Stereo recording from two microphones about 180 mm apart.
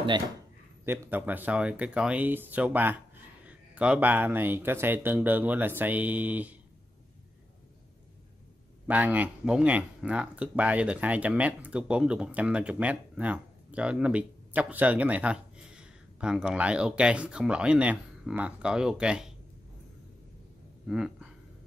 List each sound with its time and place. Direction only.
0.8 s speech: 10° right (ahead or behind)
8.8 s speech: 10° right (ahead or behind)
20.8 s speech: 5° right (ahead or behind)